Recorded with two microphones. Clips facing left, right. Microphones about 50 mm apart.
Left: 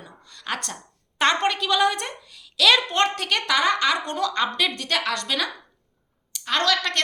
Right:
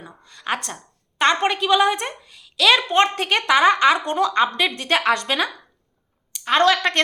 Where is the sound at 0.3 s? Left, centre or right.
Centre.